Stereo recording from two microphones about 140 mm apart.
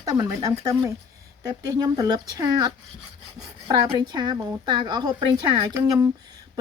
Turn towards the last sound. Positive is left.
turn(degrees=-25)  # may be behind; listen again after turning